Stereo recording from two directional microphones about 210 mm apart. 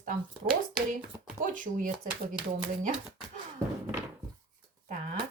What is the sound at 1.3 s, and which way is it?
Speech, 40° right (ahead or behind).